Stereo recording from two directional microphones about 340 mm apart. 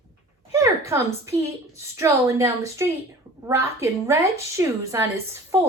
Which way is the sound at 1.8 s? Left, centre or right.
Centre.